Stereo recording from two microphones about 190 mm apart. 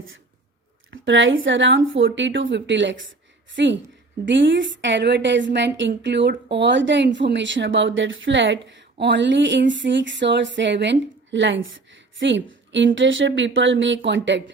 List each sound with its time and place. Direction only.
0.9 s a woman's voice: 70° right (ahead or behind)